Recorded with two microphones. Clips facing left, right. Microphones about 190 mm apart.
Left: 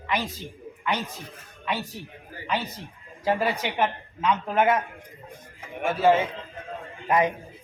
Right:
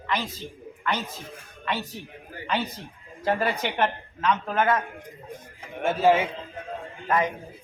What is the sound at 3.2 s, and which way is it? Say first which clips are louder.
A woman's voice: even; 10° left (ahead or behind).